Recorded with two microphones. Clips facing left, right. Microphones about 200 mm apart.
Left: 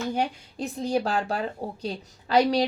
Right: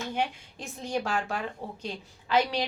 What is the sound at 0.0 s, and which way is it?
Speech, 40° left (ahead or behind).